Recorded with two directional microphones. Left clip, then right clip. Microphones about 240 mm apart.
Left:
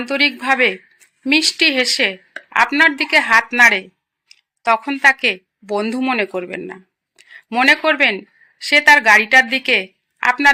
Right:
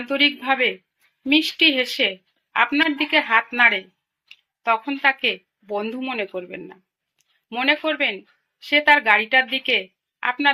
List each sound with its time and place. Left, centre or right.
0.0 s a woman's voice: left